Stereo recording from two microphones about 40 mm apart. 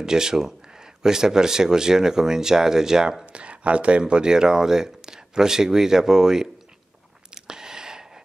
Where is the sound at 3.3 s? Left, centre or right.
Right; by 6.4 s centre.